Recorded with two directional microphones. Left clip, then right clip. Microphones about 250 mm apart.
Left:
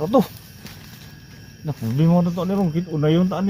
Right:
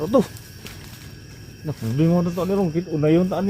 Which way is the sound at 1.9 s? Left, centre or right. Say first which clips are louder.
Even; left.